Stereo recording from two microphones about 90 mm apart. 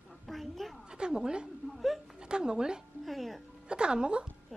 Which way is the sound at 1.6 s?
Centre (ahead or behind).